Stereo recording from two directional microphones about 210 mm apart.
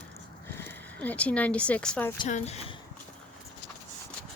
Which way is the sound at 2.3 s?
30° left (ahead or behind).